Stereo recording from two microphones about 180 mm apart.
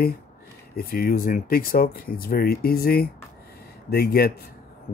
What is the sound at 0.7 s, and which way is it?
Speech, 55° left (ahead or behind).